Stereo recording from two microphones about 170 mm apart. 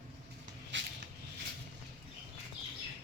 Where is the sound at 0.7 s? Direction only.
90° right.